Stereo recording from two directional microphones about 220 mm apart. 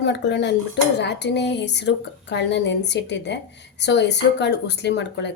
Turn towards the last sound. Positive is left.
turn(degrees=50)  # may be behind; listen again after turning